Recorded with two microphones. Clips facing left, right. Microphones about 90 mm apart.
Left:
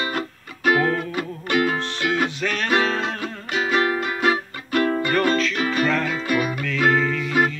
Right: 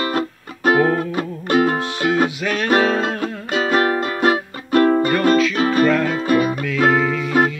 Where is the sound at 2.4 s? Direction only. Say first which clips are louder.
Right 4 dB; 10° right (ahead or behind).